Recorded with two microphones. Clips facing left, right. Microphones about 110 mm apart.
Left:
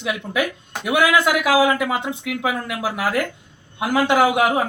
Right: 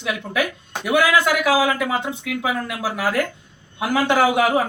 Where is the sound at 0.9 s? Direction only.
20° left (ahead or behind).